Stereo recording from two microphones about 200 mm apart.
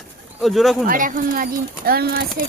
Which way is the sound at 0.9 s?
40° right (ahead or behind).